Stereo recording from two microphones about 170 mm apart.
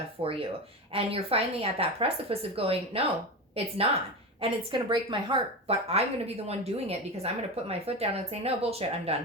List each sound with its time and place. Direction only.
0.2 s a woman's voice: 30° right (ahead or behind)